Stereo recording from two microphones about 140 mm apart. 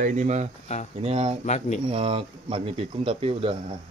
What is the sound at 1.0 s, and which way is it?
Speech, 45° right (ahead or behind).